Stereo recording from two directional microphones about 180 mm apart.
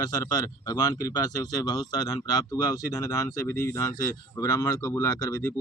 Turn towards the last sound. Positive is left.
turn(degrees=20)  # may be behind; listen again after turning